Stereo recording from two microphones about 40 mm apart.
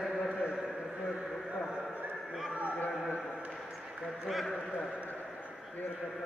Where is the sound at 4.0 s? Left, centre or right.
Centre.